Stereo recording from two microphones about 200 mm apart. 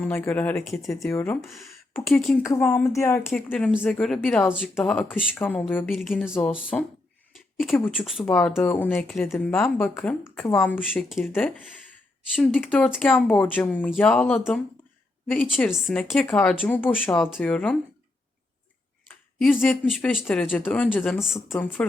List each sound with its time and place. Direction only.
0.0 s speech: 10° left (ahead or behind)
1.4 s speech: centre (ahead or behind)
2.4 s speech: 15° left (ahead or behind)
12.4 s speech: centre (ahead or behind)
19.4 s speech: centre (ahead or behind)